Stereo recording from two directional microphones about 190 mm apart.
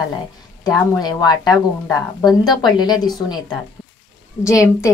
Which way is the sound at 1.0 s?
20° left (ahead or behind).